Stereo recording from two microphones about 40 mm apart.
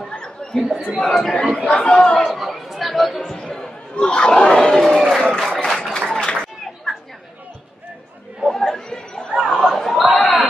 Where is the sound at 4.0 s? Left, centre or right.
Left.